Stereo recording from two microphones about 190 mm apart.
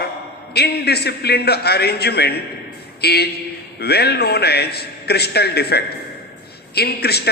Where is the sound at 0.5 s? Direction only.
55° left (ahead or behind).